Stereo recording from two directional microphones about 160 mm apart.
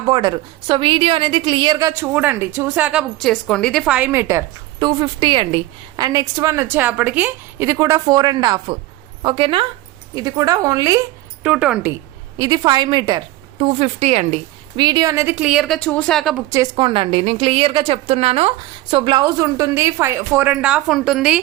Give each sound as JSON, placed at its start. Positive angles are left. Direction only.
{"t": 0.1, "sound": "a woman's voice", "side_deg": -30}
{"t": 1.9, "sound": "a woman's voice", "side_deg": -15}
{"t": 4.8, "sound": "a woman's voice", "side_deg": -30}
{"t": 10.2, "sound": "a woman's voice", "side_deg": -20}
{"t": 11.4, "sound": "a woman's voice", "side_deg": -5}
{"t": 12.4, "sound": "a woman's voice", "side_deg": -25}
{"t": 13.6, "sound": "a woman's voice", "side_deg": -40}
{"t": 16.7, "sound": "a woman's voice", "side_deg": -30}